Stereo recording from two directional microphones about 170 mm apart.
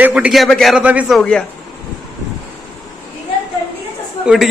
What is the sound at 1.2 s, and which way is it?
Speech, 5° left (ahead or behind).